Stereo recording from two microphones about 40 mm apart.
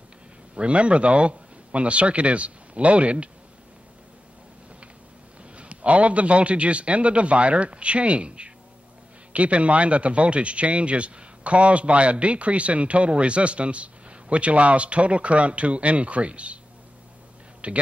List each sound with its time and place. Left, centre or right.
0.6 s speech: right
5.4 s speech: right
17.6 s a man's voice: right